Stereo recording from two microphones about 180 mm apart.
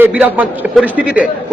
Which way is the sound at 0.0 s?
10° right (ahead or behind).